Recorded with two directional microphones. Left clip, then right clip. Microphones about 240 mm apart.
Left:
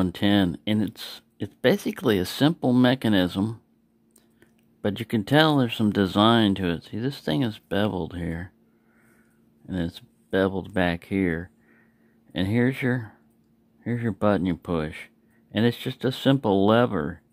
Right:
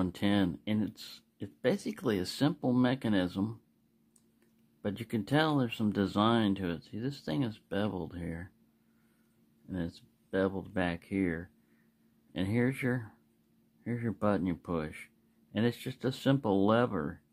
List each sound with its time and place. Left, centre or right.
0.0 s speech: centre
4.8 s speech: left
9.7 s speech: centre